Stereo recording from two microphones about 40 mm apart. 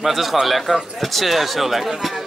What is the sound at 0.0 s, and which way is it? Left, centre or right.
Speech, centre.